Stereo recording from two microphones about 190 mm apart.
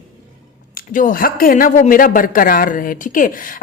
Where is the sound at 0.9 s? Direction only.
45° left (ahead or behind).